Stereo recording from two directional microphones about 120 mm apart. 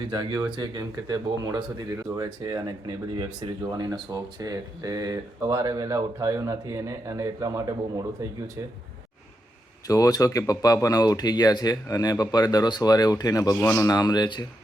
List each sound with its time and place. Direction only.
0.1 s speech: 35° right (ahead or behind)
9.8 s speech: 30° left (ahead or behind)